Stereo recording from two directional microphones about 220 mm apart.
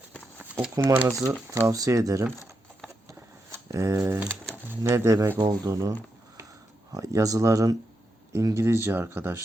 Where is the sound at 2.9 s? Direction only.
10° right (ahead or behind).